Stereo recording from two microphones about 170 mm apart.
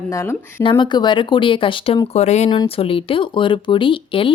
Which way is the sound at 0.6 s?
25° left (ahead or behind).